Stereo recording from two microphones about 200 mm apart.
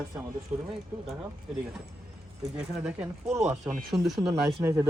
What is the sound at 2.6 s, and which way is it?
Speech, 5° right (ahead or behind).